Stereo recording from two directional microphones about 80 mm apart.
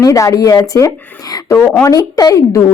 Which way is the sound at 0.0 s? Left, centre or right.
Left.